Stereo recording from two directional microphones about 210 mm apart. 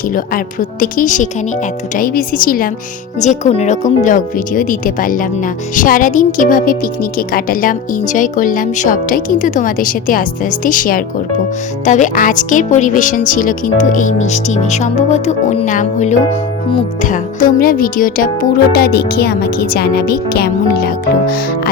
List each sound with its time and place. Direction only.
0.1 s speech: 40° left (ahead or behind)